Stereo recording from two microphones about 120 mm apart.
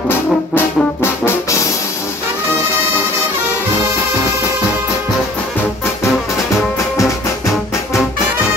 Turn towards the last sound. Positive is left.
turn(degrees=25)  # may be behind; listen again after turning